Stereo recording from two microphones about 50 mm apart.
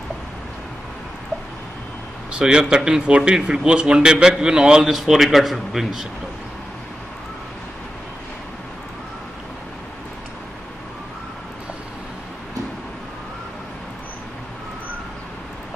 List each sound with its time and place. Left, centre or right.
2.3 s a man's voice: centre
4.8 s a man's voice: centre